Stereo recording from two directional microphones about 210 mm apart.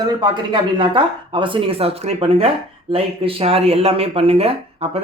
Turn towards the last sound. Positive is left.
turn(degrees=-30)  # may be behind; listen again after turning